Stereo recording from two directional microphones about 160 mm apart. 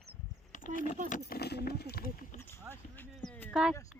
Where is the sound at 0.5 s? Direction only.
55° left (ahead or behind).